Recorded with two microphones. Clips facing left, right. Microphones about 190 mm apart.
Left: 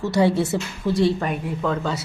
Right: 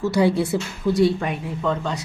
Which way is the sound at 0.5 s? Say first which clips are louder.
Right 1 dB; centre (ahead or behind).